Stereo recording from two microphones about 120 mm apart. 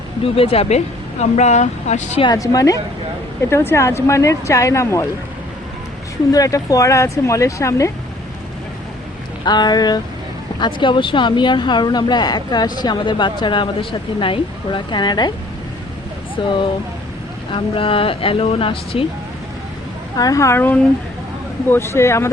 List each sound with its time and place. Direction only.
0.3 s speech: 55° left (ahead or behind)
1.2 s speech: 75° left (ahead or behind)
2.2 s speech: 30° left (ahead or behind)
6.3 s speech: 30° left (ahead or behind)
9.4 s speech: 35° left (ahead or behind)
16.4 s speech: 45° left (ahead or behind)
20.1 s speech: 30° left (ahead or behind)